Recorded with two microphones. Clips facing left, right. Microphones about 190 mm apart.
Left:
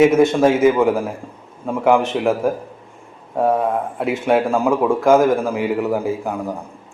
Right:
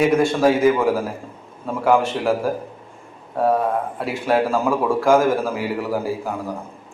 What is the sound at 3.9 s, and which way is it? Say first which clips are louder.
A man's voice: left 5 dB; 20° left (ahead or behind).